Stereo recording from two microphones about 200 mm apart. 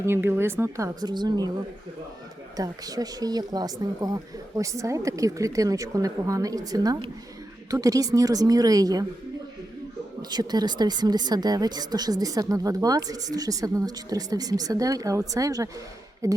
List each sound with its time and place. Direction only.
0.0 s speech: 10° right (ahead or behind)
2.6 s speech: 20° right (ahead or behind)
10.2 s speech: 20° right (ahead or behind)